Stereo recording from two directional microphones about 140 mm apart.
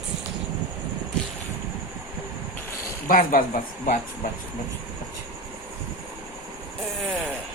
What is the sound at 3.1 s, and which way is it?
Speech, 80° left.